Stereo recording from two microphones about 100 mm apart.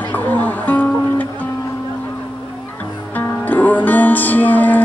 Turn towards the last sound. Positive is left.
turn(degrees=15)  # may be behind; listen again after turning